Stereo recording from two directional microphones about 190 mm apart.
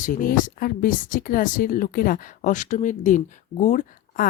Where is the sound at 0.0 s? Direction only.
45° left (ahead or behind).